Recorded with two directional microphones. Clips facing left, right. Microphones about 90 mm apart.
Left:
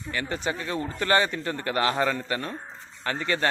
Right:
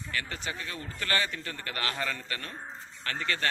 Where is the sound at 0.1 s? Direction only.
20° left (ahead or behind).